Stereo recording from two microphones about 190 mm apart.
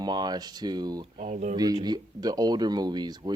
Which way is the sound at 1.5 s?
20° right (ahead or behind).